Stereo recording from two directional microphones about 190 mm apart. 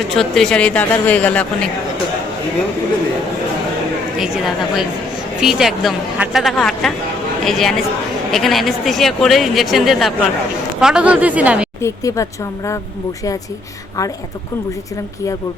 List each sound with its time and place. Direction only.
0.2 s speech: 5° left (ahead or behind)
4.2 s speech: centre (ahead or behind)
11.8 s speech: 15° left (ahead or behind)